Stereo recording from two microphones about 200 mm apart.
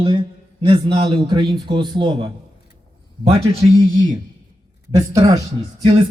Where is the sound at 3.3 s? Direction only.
30° right (ahead or behind).